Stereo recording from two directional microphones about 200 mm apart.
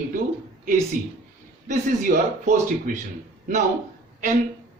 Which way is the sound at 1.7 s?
40° right (ahead or behind).